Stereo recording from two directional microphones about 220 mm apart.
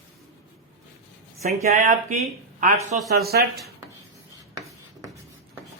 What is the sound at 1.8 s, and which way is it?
Speech, 35° right (ahead or behind).